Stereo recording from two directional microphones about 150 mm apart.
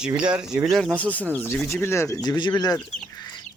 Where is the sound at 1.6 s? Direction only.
15° left (ahead or behind).